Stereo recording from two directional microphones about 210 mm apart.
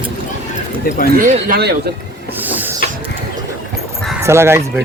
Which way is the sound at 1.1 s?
40° right (ahead or behind).